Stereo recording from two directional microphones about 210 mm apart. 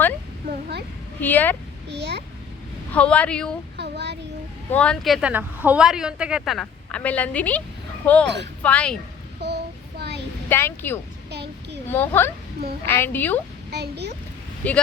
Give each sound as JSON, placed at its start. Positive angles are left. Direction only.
{"t": 1.2, "sound": "speech", "side_deg": 10}
{"t": 1.9, "sound": "a child's voice", "side_deg": -55}
{"t": 2.9, "sound": "a woman's voice", "side_deg": 5}
{"t": 3.8, "sound": "a child's voice", "side_deg": -50}
{"t": 4.7, "sound": "a woman's voice", "side_deg": 5}
{"t": 9.4, "sound": "child singing", "side_deg": -50}
{"t": 10.5, "sound": "speech", "side_deg": 10}
{"t": 11.3, "sound": "child singing", "side_deg": -55}
{"t": 11.9, "sound": "speech", "side_deg": 10}
{"t": 13.7, "sound": "speech", "side_deg": -50}
{"t": 14.6, "sound": "speech", "side_deg": 5}